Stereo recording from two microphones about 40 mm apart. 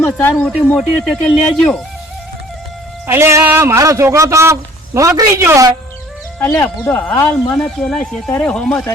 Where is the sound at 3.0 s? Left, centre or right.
Right.